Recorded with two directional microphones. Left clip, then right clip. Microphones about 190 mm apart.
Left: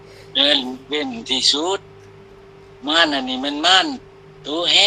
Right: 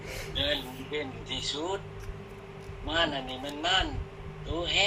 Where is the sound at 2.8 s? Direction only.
65° left (ahead or behind).